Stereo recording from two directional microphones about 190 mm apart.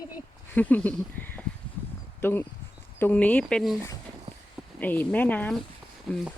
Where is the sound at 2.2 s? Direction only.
10° left (ahead or behind).